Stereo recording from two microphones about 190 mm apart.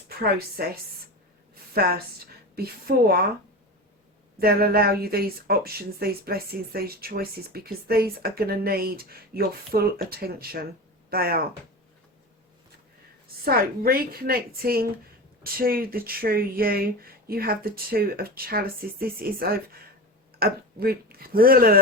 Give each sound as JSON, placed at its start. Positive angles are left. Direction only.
{"t": 0.2, "sound": "speech", "side_deg": -55}
{"t": 2.6, "sound": "speech", "side_deg": -55}
{"t": 4.4, "sound": "speech", "side_deg": -55}
{"t": 13.4, "sound": "speech", "side_deg": -50}